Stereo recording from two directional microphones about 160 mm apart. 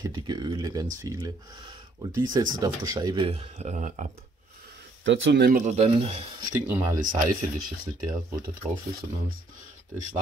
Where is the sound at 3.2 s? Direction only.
45° right (ahead or behind).